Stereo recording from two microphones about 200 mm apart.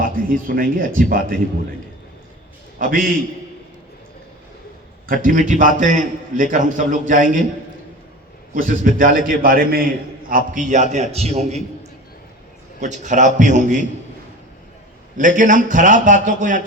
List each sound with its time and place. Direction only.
0.0 s a man's voice: 45° right (ahead or behind)
2.7 s a man's voice: 45° right (ahead or behind)
5.0 s a man's voice: 45° right (ahead or behind)
8.5 s a man's voice: 45° right (ahead or behind)
15.4 s a man's voice: 40° right (ahead or behind)